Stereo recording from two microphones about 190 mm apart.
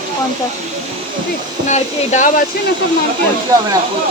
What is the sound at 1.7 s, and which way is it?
Speech, 40° left (ahead or behind).